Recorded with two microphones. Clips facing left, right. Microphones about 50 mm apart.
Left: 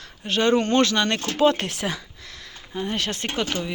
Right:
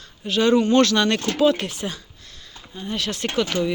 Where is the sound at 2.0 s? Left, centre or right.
Left.